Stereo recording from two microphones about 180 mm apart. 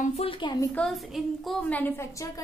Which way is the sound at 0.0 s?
35° left (ahead or behind).